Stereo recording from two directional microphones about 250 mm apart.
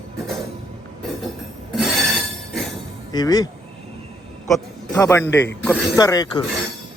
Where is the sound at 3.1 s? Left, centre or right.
Centre.